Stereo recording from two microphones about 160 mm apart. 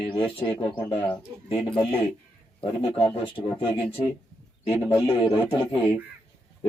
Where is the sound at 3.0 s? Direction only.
35° left (ahead or behind).